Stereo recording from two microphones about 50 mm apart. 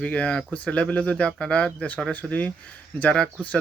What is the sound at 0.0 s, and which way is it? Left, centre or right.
Speech, left.